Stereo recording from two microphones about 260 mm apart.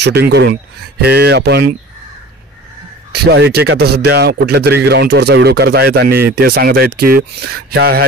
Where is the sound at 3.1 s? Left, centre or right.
Right.